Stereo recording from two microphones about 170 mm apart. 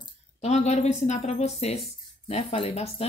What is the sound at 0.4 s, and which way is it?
Speech, 40° left (ahead or behind).